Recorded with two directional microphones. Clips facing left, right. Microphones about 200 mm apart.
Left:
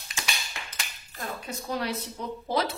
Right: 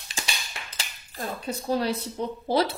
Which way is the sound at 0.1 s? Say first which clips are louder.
Right 1 dB; 30° right (ahead or behind).